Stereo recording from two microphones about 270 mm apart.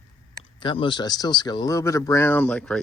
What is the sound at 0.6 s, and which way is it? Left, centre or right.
Speech, centre.